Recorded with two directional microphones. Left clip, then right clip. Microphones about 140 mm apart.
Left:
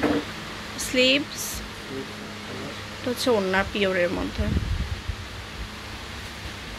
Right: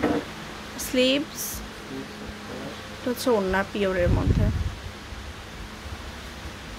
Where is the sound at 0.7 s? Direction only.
20° right (ahead or behind).